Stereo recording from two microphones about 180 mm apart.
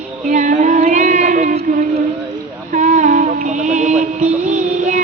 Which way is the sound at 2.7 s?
45° right (ahead or behind).